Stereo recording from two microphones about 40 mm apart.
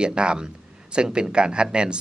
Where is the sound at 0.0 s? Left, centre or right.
Right.